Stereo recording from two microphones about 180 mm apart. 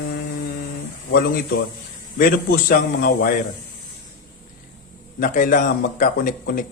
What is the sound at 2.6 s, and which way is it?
Speech, 55° left (ahead or behind).